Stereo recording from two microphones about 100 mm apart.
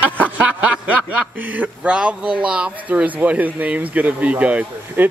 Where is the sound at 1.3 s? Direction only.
15° right (ahead or behind).